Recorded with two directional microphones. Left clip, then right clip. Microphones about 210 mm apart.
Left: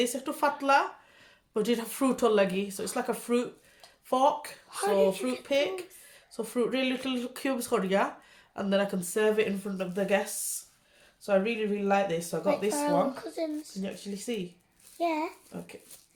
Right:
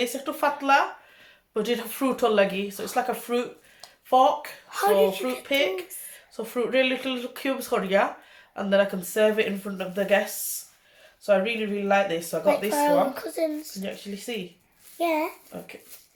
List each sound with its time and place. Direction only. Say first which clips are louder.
0.0 s speech: right 3 dB; 45° left (ahead or behind)
4.7 s speech: right 5 dB; 10° right (ahead or behind)
5.5 s speech: right 4 dB; 45° left (ahead or behind)
11.3 s speech: right 4 dB; 45° left (ahead or behind)
12.5 s speech: right 6 dB; 15° right (ahead or behind)
13.8 s speech: right 2 dB; 45° left (ahead or behind)
14.9 s a child's voice: right 5 dB; 10° right (ahead or behind)
15.5 s dog: right 4 dB; 40° left (ahead or behind)